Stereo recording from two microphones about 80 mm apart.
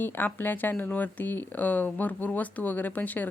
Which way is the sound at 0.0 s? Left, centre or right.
Left.